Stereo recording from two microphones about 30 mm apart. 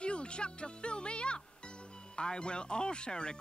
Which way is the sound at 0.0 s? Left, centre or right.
Left.